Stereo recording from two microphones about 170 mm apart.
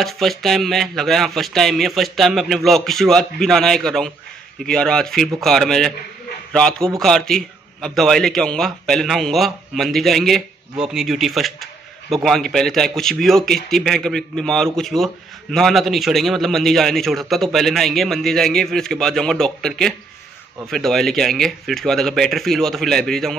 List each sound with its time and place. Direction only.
0.0 s a man's voice: centre (ahead or behind)